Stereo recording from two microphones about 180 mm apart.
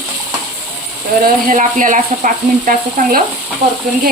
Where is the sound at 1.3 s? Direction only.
50° right (ahead or behind).